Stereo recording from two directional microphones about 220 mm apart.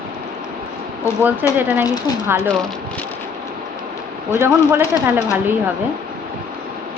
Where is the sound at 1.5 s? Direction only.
10° right (ahead or behind).